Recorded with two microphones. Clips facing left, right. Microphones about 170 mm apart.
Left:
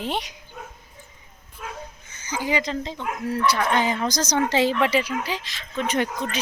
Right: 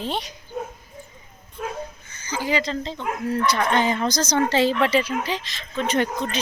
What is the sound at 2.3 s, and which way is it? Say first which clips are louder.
Speech: right 1 dB; 15° left (ahead or behind).